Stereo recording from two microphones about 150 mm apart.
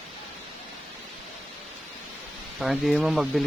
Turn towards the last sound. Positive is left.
turn(degrees=0)  # may be behind; listen again after turning